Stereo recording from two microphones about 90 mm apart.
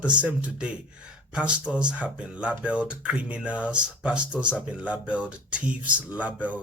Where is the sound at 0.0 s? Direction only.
15° right (ahead or behind).